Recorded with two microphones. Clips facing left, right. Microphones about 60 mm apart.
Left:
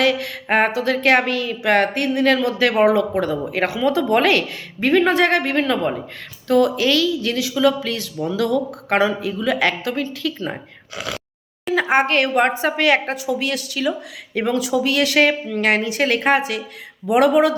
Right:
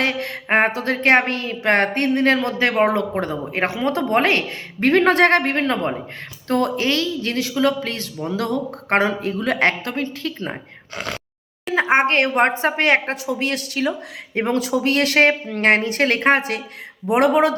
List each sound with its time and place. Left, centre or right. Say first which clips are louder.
0.0 s a sound: left 3 dB; right
0.5 s speech: left 1 dB; right
4.8 s a woman's voice: right 1 dB; right
17.1 s speech: left 1 dB; right